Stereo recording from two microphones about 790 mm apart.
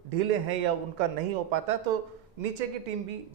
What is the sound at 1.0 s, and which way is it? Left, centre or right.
Speech, right.